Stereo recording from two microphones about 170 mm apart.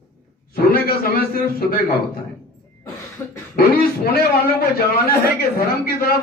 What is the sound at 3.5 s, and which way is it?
Speech, 60° left (ahead or behind).